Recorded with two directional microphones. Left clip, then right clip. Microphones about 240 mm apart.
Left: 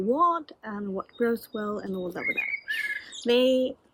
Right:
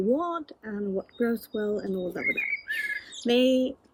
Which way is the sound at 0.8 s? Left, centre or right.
Centre.